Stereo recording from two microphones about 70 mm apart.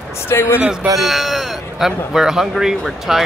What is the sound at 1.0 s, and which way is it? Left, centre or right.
Speech, centre.